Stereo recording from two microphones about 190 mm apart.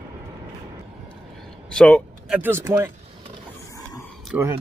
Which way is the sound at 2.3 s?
10° right (ahead or behind).